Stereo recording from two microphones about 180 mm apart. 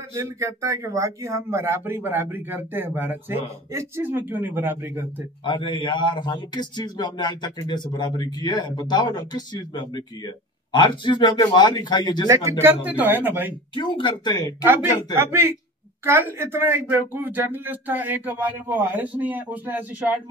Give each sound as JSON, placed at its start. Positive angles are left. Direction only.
{"t": 0.1, "sound": "speech", "side_deg": -15}
{"t": 5.4, "sound": "a man's voice", "side_deg": 25}
{"t": 12.3, "sound": "speech", "side_deg": -15}
{"t": 13.7, "sound": "a man's voice", "side_deg": 25}
{"t": 14.6, "sound": "speech", "side_deg": -10}